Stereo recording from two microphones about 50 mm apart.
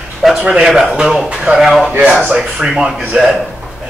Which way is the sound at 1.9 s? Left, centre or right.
Right.